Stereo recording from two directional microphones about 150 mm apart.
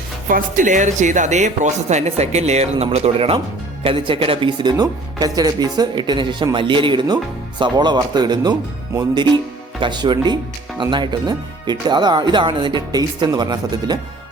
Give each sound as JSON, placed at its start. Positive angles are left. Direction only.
{"t": 0.3, "sound": "speech", "side_deg": -65}